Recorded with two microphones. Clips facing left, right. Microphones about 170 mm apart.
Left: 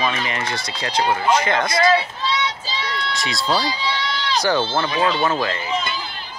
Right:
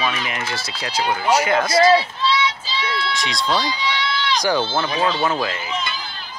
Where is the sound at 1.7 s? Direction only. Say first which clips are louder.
Right 4 dB; 30° right (ahead or behind).